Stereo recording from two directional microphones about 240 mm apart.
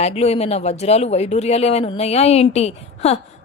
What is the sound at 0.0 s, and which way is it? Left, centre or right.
Speech, left.